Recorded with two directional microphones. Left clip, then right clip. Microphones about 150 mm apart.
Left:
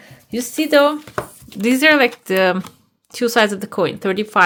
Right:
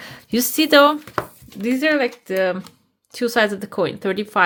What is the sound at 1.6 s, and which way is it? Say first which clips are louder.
Speech: left 6 dB; 30° left (ahead or behind).